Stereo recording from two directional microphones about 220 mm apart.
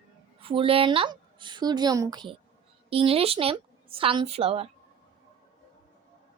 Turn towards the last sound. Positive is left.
turn(degrees=-25)  # may be behind; listen again after turning